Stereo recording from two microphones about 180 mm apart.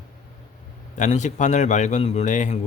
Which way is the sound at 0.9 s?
40° left (ahead or behind).